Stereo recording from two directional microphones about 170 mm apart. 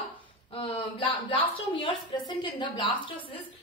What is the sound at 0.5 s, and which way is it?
A woman's voice, 35° left (ahead or behind).